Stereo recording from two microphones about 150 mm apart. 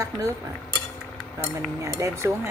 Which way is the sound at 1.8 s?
20° right (ahead or behind).